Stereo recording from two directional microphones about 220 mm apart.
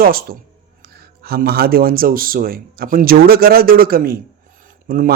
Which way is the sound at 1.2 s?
45° right (ahead or behind).